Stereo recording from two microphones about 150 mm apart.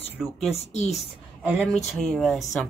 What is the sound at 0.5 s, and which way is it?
Speech, 45° left (ahead or behind).